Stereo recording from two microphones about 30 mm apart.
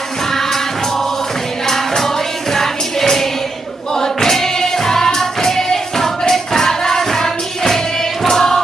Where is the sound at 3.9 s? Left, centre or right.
Centre.